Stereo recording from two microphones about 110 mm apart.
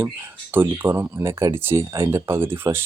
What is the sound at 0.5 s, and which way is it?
Speech, 20° right (ahead or behind).